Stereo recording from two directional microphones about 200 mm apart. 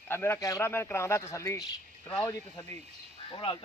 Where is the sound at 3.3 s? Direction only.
25° left (ahead or behind).